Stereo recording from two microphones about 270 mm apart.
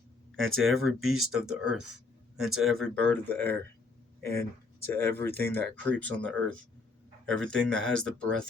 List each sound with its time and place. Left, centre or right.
0.5 s speech: centre